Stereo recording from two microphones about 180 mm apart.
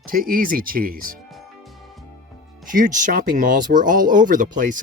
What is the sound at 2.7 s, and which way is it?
Speech, 45° right (ahead or behind).